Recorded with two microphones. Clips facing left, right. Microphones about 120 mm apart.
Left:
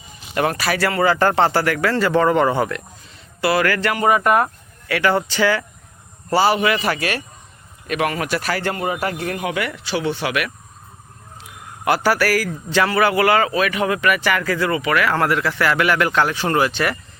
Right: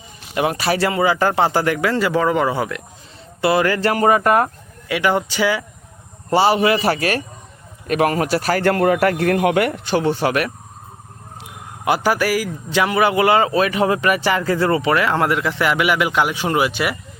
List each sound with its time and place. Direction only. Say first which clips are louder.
0.5 s a man's voice: right 2 dB; 25° right (ahead or behind); by 2.8 s 5° right (ahead or behind)
3.4 s speech: right 2 dB; 25° right (ahead or behind)
4.9 s a man's voice: even; 15° right (ahead or behind)
6.3 s speech: right 2 dB; 25° right (ahead or behind)
8.6 s speech: right 7 dB; 60° right (ahead or behind); by 10.5 s 40° right (ahead or behind)
11.9 s a man's voice: even; 15° right (ahead or behind)